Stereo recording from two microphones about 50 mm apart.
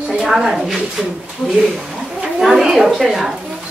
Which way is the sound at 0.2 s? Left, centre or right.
Centre.